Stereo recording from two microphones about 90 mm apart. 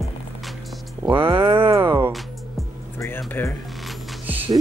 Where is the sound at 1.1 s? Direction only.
90° right.